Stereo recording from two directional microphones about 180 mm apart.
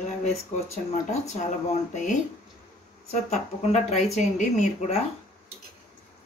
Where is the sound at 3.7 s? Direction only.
40° left (ahead or behind).